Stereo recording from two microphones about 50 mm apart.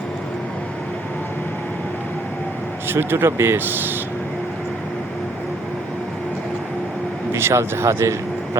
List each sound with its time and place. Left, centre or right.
2.9 s speech: right
3.6 s speech: right
7.3 s speech: right